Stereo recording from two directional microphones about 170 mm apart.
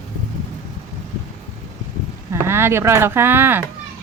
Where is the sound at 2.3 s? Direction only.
15° right (ahead or behind).